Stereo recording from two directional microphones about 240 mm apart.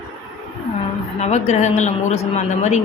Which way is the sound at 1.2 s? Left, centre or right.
Left.